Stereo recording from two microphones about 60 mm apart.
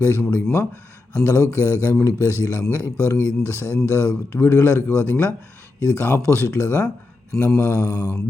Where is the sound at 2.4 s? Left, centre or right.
Left.